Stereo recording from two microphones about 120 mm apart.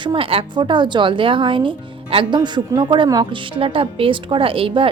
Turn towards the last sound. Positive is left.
turn(degrees=-50)  # may be behind; listen again after turning